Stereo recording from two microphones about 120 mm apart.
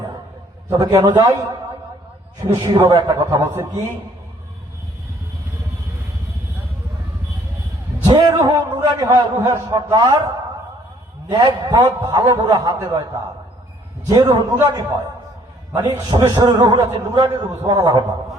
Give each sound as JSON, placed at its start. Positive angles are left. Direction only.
{"t": 0.7, "sound": "a man's voice", "side_deg": -30}
{"t": 8.0, "sound": "a man's voice", "side_deg": -40}
{"t": 14.1, "sound": "a man's voice", "side_deg": -35}